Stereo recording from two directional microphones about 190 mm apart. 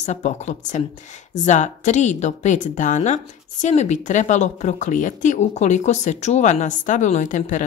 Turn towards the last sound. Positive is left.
turn(degrees=40)  # may be behind; listen again after turning